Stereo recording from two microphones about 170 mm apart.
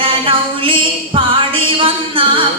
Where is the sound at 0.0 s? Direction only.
30° right (ahead or behind).